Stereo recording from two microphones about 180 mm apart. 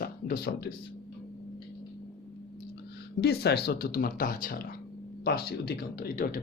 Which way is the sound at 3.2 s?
65° left (ahead or behind).